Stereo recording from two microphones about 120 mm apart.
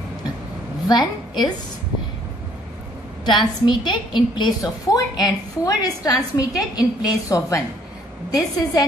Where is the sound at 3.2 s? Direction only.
40° left (ahead or behind).